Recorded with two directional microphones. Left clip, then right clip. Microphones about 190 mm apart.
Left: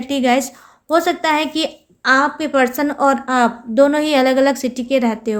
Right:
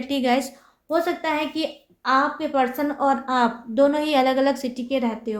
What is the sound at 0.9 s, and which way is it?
A woman's voice, 50° left (ahead or behind).